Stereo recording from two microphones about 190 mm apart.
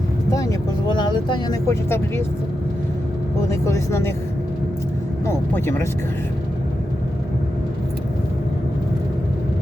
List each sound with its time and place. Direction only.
0.3 s speech: 15° left (ahead or behind)
3.5 s speech: 15° left (ahead or behind)
5.2 s speech: 10° left (ahead or behind)